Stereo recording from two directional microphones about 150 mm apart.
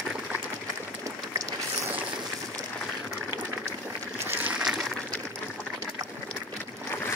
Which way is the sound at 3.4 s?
10° right (ahead or behind).